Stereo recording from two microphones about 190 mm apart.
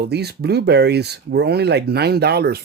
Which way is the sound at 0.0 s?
60° right (ahead or behind).